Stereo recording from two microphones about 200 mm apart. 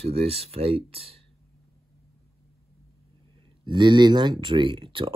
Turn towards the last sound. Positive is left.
turn(degrees=-25)  # may be behind; listen again after turning